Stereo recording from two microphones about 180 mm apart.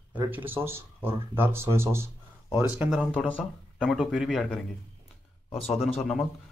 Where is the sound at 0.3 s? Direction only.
10° right (ahead or behind).